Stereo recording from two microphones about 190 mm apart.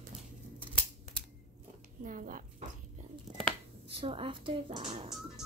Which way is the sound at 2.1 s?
45° right (ahead or behind).